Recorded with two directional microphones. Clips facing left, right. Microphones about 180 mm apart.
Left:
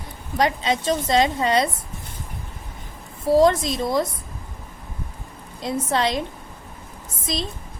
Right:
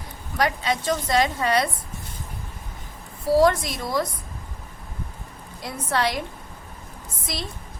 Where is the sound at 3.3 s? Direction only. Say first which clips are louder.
Left 2 dB; 20° left (ahead or behind).